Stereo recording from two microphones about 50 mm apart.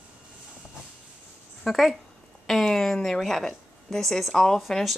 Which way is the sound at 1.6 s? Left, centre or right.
Centre.